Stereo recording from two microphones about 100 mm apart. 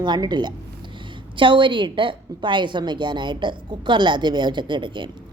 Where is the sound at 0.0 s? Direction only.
45° right (ahead or behind).